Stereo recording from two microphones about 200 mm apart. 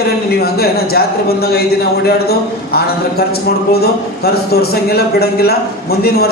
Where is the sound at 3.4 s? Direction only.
50° left (ahead or behind).